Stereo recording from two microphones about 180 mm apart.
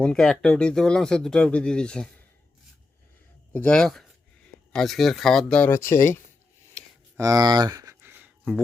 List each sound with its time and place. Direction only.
0.0 s speech: 5° left (ahead or behind)
3.5 s speech: 5° left (ahead or behind)
7.2 s a sound: 20° right (ahead or behind)